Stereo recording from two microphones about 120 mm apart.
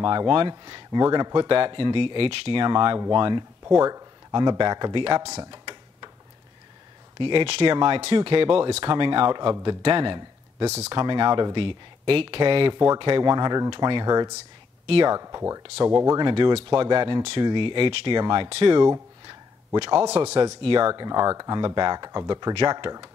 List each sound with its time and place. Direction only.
0.0 s speech: 40° right (ahead or behind)
3.6 s speech: 25° right (ahead or behind); by 5.3 s 50° right (ahead or behind)
5.3 s tick-tock: 35° right (ahead or behind)
7.2 s speech: 45° right (ahead or behind)
7.4 s speech: 60° right (ahead or behind)
7.7 s speech: 45° right (ahead or behind)
12.7 s speech: 25° right (ahead or behind)
13.0 s speech: 40° right (ahead or behind)
14.9 s speech: 45° right (ahead or behind)
15.1 s speech: 25° right (ahead or behind)
16.2 s speech: 40° right (ahead or behind)
18.8 s speech: 35° right (ahead or behind); by 20.3 s 60° right (ahead or behind)
20.6 s speech: 45° right (ahead or behind)